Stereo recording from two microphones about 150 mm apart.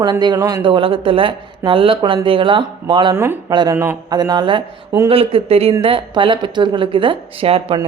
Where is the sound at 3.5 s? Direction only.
30° right (ahead or behind).